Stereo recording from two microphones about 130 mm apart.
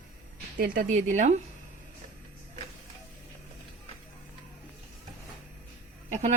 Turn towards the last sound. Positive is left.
turn(degrees=-60)  # may be behind; listen again after turning